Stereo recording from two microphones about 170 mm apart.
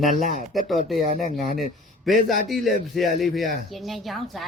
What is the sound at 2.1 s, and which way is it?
Speech, centre (ahead or behind).